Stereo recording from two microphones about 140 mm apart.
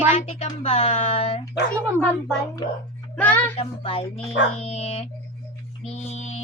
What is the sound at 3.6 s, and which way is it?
A woman's voice, 45° left (ahead or behind).